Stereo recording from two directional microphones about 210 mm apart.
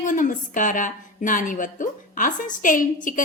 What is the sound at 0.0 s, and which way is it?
Speech, 40° left (ahead or behind).